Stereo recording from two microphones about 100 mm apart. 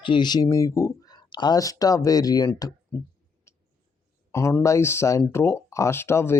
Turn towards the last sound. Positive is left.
turn(degrees=25)  # may be behind; listen again after turning